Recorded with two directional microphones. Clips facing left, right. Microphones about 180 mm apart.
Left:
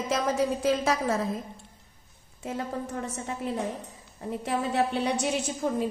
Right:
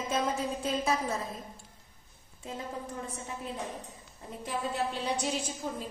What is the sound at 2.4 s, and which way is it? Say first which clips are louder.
Speech: left 6 dB; 80° left.